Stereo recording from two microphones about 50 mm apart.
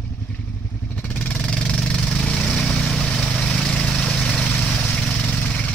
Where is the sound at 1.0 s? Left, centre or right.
Left.